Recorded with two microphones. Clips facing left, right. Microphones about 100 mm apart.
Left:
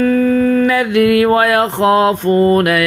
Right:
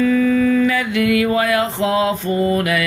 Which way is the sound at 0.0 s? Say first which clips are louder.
Left 3 dB; 45° left (ahead or behind).